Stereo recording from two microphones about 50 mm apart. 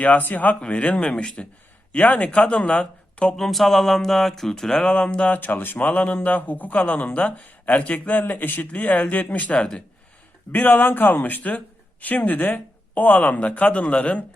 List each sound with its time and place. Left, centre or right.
0.0 s speech: left
3.3 s speech: centre
4.9 s speech: left
5.5 s speech: left